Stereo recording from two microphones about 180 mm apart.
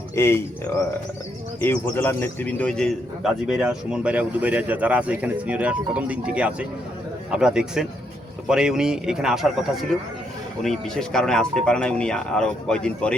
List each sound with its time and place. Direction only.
0.2 s speech: 15° left (ahead or behind)
1.6 s a man's voice: 10° left (ahead or behind)
10.6 s speech: centre (ahead or behind)